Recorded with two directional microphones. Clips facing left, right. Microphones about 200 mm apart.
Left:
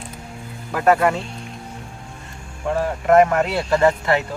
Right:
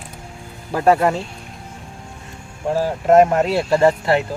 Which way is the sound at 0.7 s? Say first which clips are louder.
Right 1 dB; 30° right (ahead or behind).